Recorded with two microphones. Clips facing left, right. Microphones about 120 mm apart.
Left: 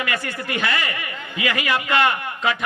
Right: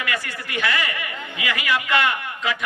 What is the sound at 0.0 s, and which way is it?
A man's voice, 30° left (ahead or behind).